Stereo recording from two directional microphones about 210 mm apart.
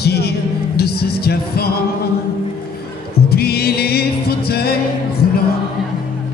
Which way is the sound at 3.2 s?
50° left (ahead or behind).